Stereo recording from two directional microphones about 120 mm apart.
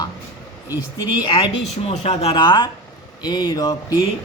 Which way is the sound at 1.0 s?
35° left (ahead or behind).